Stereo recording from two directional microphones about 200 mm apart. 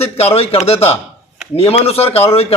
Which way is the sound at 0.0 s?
30° left (ahead or behind).